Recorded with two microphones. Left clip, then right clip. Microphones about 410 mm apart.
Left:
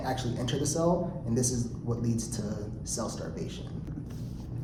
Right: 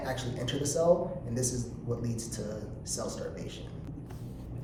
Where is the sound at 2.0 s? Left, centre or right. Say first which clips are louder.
Left 4 dB; centre.